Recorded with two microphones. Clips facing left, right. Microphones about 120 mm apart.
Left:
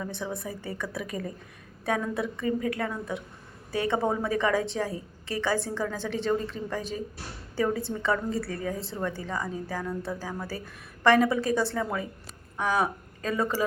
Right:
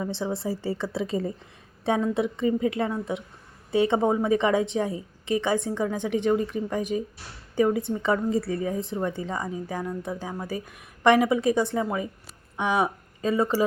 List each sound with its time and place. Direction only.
0.0 s a woman's voice: 25° right (ahead or behind)